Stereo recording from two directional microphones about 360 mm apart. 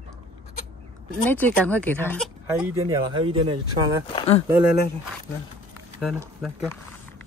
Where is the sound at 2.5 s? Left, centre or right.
Centre.